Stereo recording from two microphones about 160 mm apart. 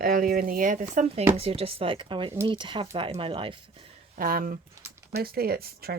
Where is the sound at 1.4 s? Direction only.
35° right (ahead or behind).